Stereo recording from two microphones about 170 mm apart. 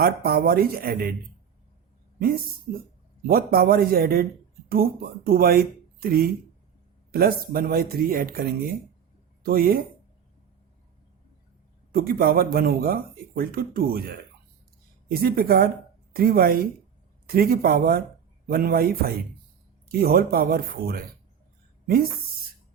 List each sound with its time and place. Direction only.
0.0 s speech: 60° right (ahead or behind)
2.1 s speech: 60° right (ahead or behind)
11.9 s speech: 60° right (ahead or behind)